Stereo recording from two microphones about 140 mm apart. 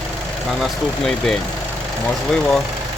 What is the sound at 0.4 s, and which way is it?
Speech, centre (ahead or behind).